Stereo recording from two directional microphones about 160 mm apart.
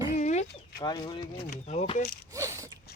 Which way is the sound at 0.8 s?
25° left (ahead or behind).